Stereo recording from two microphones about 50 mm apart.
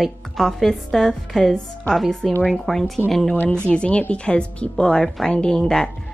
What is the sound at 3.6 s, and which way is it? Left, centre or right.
Speech, left.